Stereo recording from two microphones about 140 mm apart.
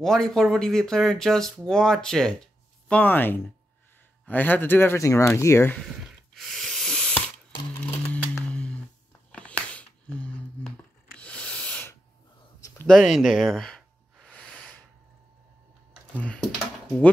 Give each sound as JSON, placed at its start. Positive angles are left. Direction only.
{"t": 0.0, "sound": "speech", "side_deg": 5}
{"t": 5.8, "sound": "a sound", "side_deg": 0}
{"t": 16.2, "sound": "speech", "side_deg": 10}